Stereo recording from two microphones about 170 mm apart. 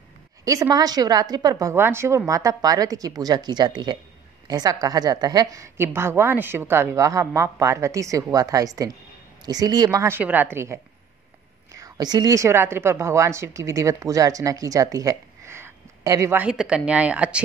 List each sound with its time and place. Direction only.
0.5 s a woman's voice: 20° right (ahead or behind)